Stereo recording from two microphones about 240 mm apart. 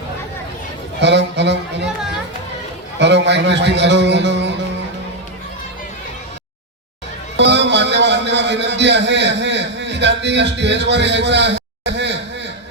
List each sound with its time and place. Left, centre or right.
1.0 s a man's voice: right
3.0 s a man's voice: right
7.3 s a sound: right